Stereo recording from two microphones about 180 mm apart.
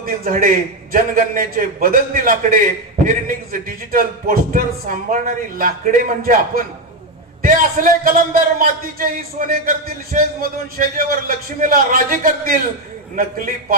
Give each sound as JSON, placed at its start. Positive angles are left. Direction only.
{"t": 0.0, "sound": "a man's voice", "side_deg": -50}